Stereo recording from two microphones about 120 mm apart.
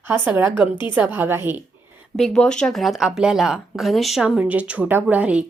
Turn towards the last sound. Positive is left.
turn(degrees=-10)  # may be behind; listen again after turning